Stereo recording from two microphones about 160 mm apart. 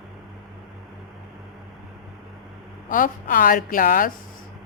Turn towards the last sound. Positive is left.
turn(degrees=60)  # may be behind; listen again after turning